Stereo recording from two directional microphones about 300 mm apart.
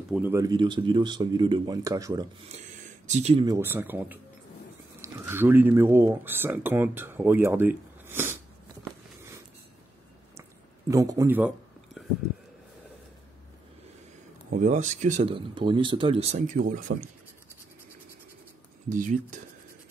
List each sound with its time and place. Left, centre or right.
0.1 s speech: centre
10.9 s a man's voice: centre
14.5 s speech: right
18.9 s speech: right